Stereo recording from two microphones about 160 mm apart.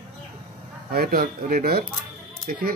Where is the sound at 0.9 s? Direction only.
70° right (ahead or behind).